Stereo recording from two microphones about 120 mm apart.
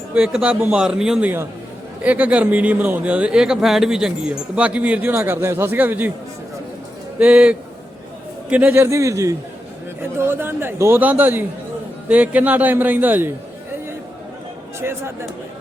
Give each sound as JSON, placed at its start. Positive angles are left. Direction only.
{"t": 0.1, "sound": "a man's voice", "side_deg": -10}
{"t": 7.2, "sound": "speech", "side_deg": -10}
{"t": 14.8, "sound": "speech", "side_deg": -20}